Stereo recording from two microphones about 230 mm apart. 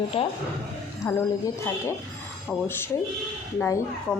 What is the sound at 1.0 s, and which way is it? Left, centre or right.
Speech, centre.